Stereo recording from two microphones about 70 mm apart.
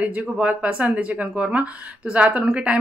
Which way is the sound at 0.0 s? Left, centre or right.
Centre.